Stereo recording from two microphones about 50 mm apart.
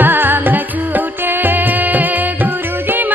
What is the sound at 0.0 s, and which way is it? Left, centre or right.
Music, right.